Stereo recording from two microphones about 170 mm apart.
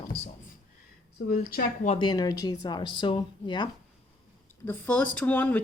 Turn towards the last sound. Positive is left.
turn(degrees=10)  # may be behind; listen again after turning